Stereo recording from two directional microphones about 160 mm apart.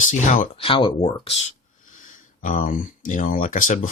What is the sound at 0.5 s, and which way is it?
Speech, 35° left (ahead or behind).